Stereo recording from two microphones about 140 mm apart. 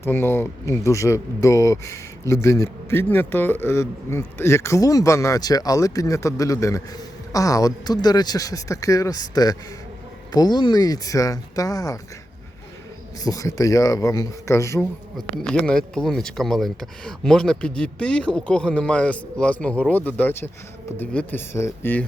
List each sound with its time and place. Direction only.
0.0 s a man's voice: 15° left (ahead or behind)
13.2 s a man's voice: 25° left (ahead or behind)
15.3 s speech: 5° left (ahead or behind)